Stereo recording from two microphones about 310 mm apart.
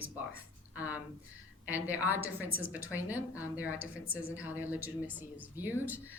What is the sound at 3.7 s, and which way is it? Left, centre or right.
Speech, left.